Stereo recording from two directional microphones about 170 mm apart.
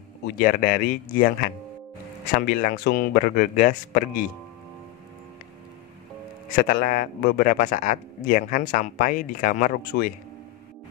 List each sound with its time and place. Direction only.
0.4 s speech: 55° left (ahead or behind)
2.3 s speech: 55° left (ahead or behind)
6.5 s a man's voice: 60° left (ahead or behind)